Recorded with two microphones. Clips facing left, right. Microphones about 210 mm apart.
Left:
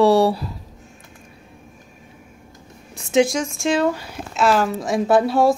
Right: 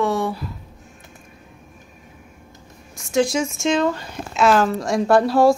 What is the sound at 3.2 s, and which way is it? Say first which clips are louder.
A woman's voice: right 1 dB; 5° right (ahead or behind).